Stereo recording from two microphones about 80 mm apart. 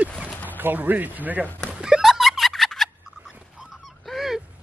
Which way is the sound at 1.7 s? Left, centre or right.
Centre.